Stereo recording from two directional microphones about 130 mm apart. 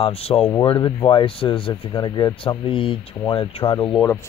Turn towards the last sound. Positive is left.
turn(degrees=35)  # may be behind; listen again after turning